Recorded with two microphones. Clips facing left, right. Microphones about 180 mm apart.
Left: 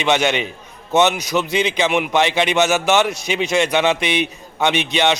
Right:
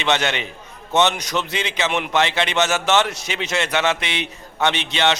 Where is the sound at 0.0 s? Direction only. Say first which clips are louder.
Left 4 dB; 15° left (ahead or behind).